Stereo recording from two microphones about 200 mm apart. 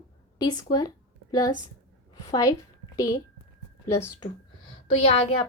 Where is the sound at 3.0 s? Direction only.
15° left (ahead or behind).